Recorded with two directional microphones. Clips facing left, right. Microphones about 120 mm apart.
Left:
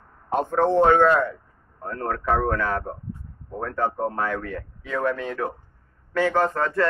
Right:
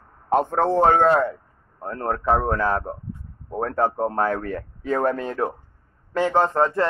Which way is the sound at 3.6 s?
45° right (ahead or behind).